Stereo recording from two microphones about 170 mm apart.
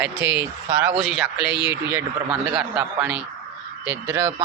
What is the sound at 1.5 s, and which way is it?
Speech, 90° right.